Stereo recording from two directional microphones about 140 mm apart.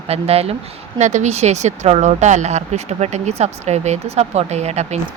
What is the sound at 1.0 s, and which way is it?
Speech, 55° right (ahead or behind).